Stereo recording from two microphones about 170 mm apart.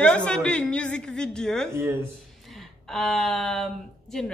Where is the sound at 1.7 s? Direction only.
15° right (ahead or behind).